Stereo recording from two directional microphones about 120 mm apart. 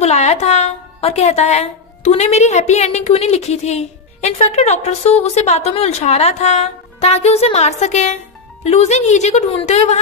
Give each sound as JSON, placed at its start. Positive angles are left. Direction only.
{"t": 0.0, "sound": "a woman's voice", "side_deg": 65}